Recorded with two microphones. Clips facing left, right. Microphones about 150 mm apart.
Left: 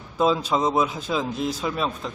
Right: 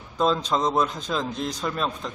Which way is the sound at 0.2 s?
5° left (ahead or behind).